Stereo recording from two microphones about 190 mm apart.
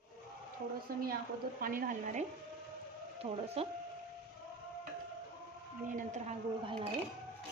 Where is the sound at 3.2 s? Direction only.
30° right (ahead or behind).